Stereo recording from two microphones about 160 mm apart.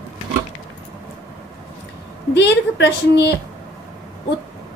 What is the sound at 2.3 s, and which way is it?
Speech, 90° left.